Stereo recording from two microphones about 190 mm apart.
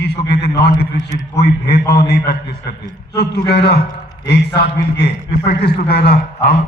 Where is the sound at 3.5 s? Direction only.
60° left (ahead or behind).